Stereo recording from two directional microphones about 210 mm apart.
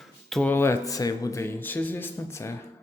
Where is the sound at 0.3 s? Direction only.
5° left (ahead or behind).